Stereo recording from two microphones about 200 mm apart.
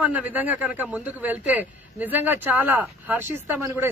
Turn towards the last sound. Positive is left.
turn(degrees=-10)  # may be behind; listen again after turning